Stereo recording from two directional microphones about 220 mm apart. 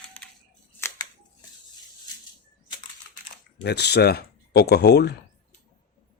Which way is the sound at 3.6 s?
50° left (ahead or behind).